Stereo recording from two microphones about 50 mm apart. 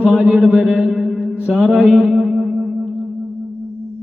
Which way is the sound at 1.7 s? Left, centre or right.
Right.